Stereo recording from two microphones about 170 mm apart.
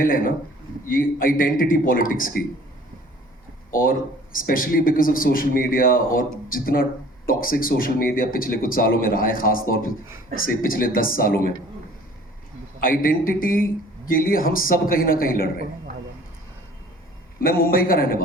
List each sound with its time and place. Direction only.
0.0 s a man's voice: 55° left (ahead or behind)
3.7 s a man's voice: 55° left (ahead or behind)
12.8 s a man's voice: 55° left (ahead or behind)
17.4 s a man's voice: 60° left (ahead or behind)